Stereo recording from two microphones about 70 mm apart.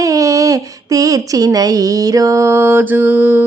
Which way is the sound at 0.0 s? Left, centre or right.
Right.